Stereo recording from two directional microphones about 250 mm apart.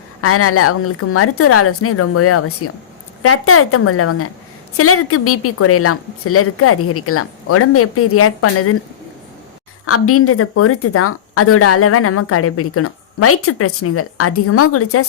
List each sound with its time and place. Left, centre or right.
0.2 s a woman's voice: left
9.8 s a woman's voice: left